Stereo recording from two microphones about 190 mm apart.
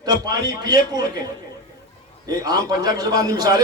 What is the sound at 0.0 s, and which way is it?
A man's voice, 20° right (ahead or behind).